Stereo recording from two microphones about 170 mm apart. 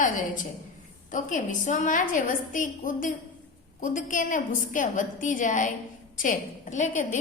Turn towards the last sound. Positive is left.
turn(degrees=45)  # may be behind; listen again after turning